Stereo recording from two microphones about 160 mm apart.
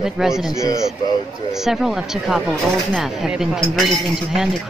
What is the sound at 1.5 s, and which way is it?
Speech, centre (ahead or behind).